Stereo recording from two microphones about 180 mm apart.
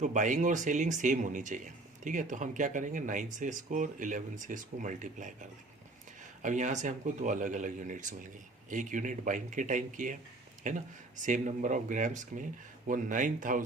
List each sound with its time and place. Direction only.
0.0 s speech: 45° right (ahead or behind)
6.4 s speech: 45° right (ahead or behind)